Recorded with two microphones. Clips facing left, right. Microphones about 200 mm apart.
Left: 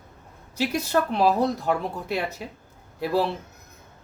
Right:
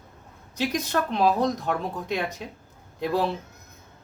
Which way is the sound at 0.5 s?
10° left (ahead or behind).